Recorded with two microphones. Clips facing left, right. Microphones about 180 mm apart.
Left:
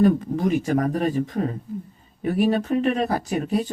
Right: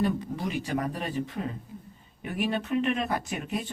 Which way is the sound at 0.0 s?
45° left (ahead or behind).